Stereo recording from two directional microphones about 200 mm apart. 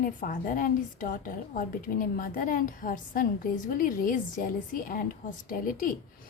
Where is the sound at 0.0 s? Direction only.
45° left (ahead or behind).